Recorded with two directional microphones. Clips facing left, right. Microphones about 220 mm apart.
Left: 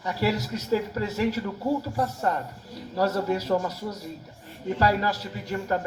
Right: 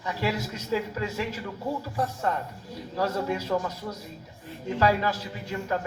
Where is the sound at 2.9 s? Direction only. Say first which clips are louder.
Left 3 dB; 40° left (ahead or behind).